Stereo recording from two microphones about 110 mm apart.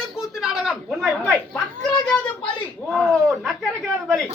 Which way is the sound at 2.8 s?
5° left (ahead or behind).